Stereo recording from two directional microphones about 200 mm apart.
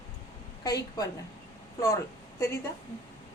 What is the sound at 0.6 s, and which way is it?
Speech, 20° left (ahead or behind).